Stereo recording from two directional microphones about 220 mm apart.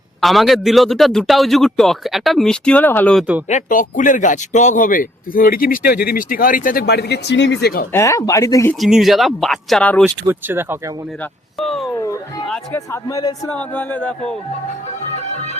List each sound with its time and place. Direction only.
0.2 s a man's voice: centre (ahead or behind)
3.5 s a man's voice: 35° left (ahead or behind)
7.9 s a man's voice: 15° left (ahead or behind)
8.8 s a man's voice: centre (ahead or behind)
10.2 s speech: 10° right (ahead or behind)
11.2 s a sound: centre (ahead or behind)
11.9 s a man's voice: 15° left (ahead or behind)